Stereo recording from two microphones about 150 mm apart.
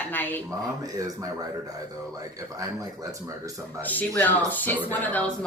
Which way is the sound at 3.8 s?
10° left (ahead or behind).